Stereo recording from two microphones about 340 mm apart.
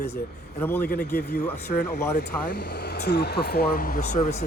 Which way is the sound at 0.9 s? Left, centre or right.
Left.